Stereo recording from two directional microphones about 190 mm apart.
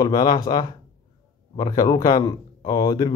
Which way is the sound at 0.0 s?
20° left (ahead or behind).